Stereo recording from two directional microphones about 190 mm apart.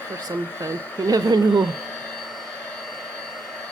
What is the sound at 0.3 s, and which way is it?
Speech, 20° right (ahead or behind).